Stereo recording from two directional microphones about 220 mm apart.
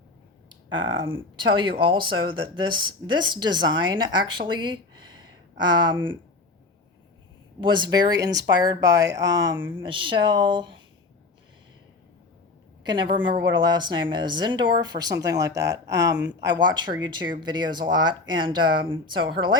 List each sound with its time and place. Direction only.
0.7 s speech: 60° right (ahead or behind)
1.4 s speech: 20° right (ahead or behind)
7.6 s speech: 20° right (ahead or behind)
9.4 s speech: 55° right (ahead or behind)
9.7 s speech: 20° right (ahead or behind)
12.8 s speech: 20° right (ahead or behind)